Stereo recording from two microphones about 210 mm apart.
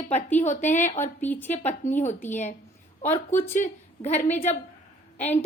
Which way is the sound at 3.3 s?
10° left (ahead or behind).